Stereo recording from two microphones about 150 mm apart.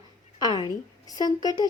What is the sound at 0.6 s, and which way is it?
A woman's voice, 25° left (ahead or behind).